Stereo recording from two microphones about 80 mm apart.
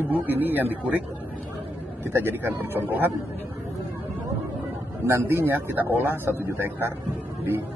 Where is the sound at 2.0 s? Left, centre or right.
Right.